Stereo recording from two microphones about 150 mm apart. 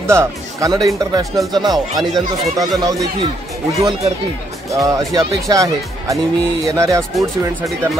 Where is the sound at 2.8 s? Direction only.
25° right (ahead or behind).